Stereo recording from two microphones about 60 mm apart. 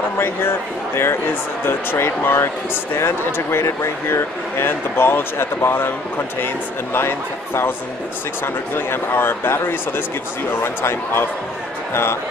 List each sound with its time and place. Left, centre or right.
0.2 s speech: left
8.7 s speech: left